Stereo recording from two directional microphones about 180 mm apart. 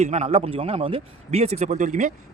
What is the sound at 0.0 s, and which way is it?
A man's voice, 40° right (ahead or behind).